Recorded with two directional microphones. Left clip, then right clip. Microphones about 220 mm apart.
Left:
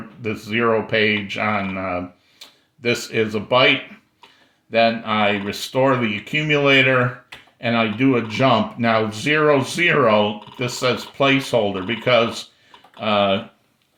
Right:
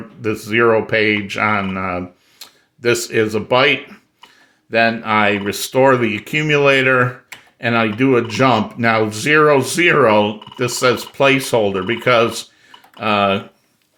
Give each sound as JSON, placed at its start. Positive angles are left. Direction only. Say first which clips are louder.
{"t": 0.2, "sound": "speech", "louder": "right 6 dB", "side_deg": -45}